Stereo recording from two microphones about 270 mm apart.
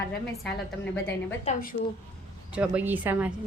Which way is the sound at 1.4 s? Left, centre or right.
Left.